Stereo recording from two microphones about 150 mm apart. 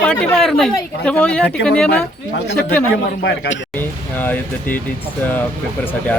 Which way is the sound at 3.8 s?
10° left (ahead or behind).